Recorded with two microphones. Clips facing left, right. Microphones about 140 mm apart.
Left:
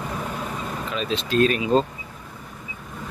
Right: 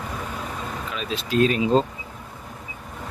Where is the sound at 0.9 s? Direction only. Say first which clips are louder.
Left 1 dB; 5° right (ahead or behind).